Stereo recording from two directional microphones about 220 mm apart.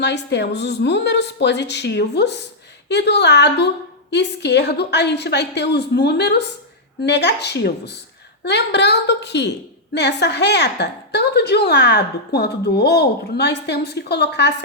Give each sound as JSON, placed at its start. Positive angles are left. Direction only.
{"t": 0.0, "sound": "a woman's voice", "side_deg": 50}